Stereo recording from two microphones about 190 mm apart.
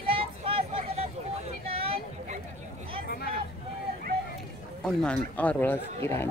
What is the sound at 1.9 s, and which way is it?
Vehicle, 40° right (ahead or behind).